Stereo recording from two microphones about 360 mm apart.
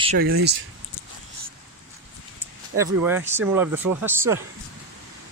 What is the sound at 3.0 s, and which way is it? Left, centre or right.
Speech, centre.